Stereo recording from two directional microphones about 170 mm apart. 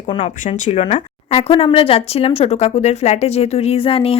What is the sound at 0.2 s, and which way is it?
Speech, 45° left (ahead or behind).